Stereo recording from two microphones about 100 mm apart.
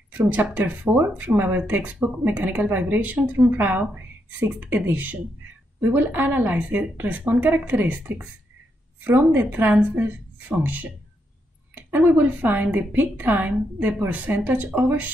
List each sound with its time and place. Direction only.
0.1 s a woman's voice: 15° right (ahead or behind)